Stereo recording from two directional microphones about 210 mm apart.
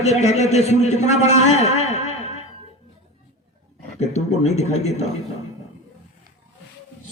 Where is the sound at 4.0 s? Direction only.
30° left (ahead or behind).